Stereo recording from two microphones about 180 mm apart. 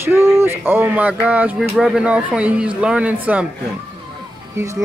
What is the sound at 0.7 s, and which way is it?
Speech, 10° right (ahead or behind).